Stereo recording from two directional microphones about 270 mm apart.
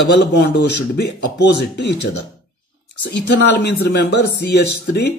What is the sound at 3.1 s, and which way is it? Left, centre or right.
Speech, left.